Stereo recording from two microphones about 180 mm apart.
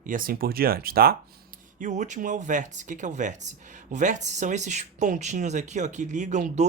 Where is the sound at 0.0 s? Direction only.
50° right (ahead or behind).